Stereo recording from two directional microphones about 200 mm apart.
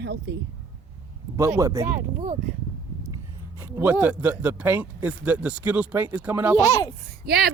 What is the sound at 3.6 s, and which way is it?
Speech, 10° right (ahead or behind).